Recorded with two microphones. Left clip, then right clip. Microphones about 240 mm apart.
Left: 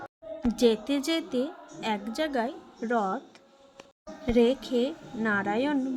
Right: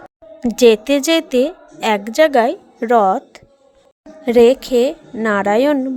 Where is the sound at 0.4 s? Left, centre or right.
Right.